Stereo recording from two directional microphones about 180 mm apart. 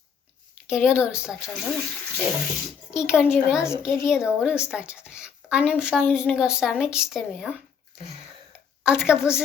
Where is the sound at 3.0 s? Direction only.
5° right (ahead or behind).